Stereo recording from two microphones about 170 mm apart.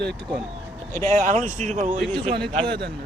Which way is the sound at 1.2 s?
45° right (ahead or behind).